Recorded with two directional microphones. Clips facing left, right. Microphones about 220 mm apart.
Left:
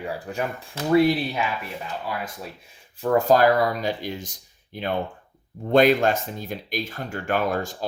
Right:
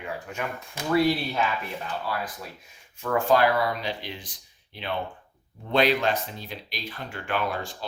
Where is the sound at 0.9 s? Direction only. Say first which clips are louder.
Left 4 dB; 20° left (ahead or behind).